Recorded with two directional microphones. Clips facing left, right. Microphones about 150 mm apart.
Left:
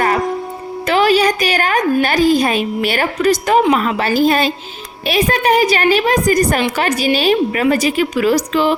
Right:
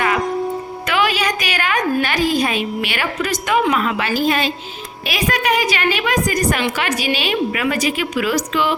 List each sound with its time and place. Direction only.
0.9 s a woman's voice: 35° left (ahead or behind)